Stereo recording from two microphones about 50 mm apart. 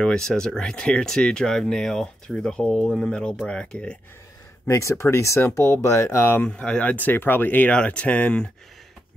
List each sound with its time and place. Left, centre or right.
0.0 s speech: centre
4.6 s speech: left
6.4 s speech: left
7.1 s speech: left
7.7 s speech: left